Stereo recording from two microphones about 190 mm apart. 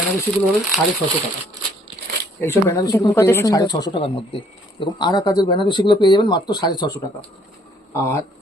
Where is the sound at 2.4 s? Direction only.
15° left (ahead or behind).